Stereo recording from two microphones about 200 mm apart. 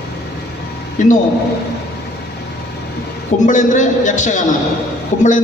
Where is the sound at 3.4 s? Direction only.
40° left (ahead or behind).